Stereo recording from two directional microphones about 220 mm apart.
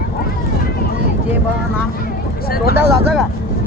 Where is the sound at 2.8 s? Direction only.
5° right (ahead or behind).